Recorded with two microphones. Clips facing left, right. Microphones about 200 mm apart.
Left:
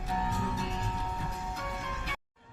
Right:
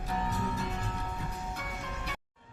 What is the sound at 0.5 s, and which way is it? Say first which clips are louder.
Music: even; 55° right (ahead or behind).